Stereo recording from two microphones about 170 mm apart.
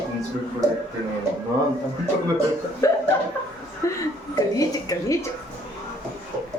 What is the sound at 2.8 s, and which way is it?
A woman's voice, 15° left (ahead or behind).